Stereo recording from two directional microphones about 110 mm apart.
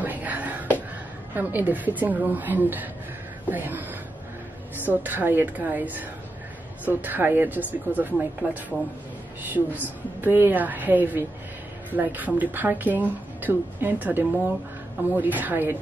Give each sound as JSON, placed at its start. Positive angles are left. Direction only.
{"t": 0.0, "sound": "a sound", "side_deg": -15}
{"t": 1.3, "sound": "speech", "side_deg": -15}
{"t": 4.8, "sound": "speech", "side_deg": -15}